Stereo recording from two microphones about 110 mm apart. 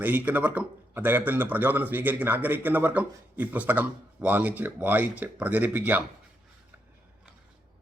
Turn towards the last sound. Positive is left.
turn(degrees=-15)  # may be behind; listen again after turning